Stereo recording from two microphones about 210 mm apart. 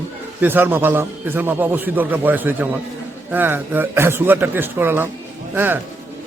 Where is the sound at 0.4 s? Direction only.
10° right (ahead or behind).